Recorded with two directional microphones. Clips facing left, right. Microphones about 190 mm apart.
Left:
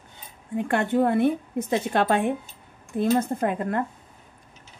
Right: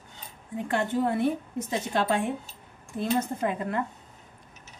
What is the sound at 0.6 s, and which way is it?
A woman's voice, 60° left (ahead or behind).